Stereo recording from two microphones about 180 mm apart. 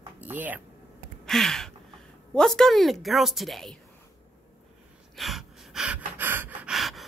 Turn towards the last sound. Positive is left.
turn(degrees=0)  # may be behind; listen again after turning